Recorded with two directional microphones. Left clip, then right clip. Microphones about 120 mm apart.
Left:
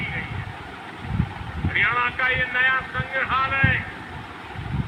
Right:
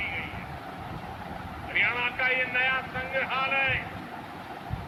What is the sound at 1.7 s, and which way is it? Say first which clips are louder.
Speech: left 5 dB; 50° left (ahead or behind).